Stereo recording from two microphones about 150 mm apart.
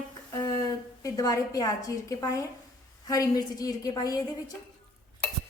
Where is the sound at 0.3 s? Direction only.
25° left (ahead or behind).